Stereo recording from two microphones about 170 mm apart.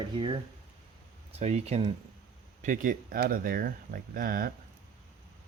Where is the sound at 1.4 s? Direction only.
40° right (ahead or behind).